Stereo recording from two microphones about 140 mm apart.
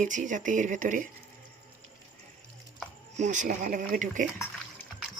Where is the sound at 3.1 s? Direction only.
60° right (ahead or behind).